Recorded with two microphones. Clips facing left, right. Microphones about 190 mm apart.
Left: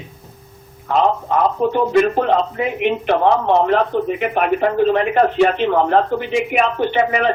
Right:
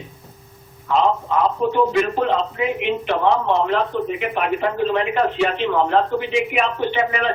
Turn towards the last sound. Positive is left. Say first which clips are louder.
# left 4 dB
turn(degrees=50)  # may be behind; listen again after turning